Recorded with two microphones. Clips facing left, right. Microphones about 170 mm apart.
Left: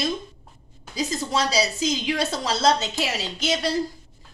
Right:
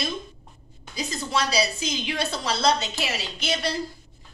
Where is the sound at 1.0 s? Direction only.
40° left (ahead or behind).